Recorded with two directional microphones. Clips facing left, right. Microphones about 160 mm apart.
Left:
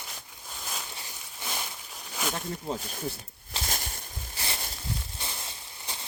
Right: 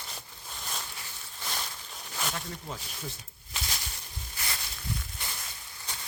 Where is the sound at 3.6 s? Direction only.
45° left (ahead or behind).